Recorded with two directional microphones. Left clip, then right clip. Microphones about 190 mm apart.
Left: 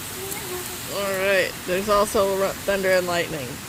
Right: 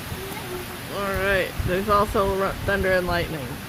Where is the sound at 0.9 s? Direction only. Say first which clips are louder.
Left 2 dB; 10° left (ahead or behind).